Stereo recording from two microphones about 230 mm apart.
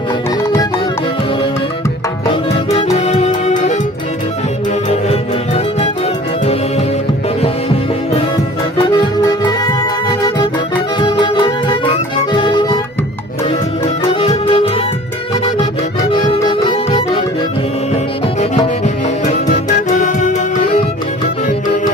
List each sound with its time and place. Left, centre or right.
2.7 s music: left
6.4 s music: left
8.8 s music: centre
13.8 s music: left
16.0 s music: left
19.9 s music: left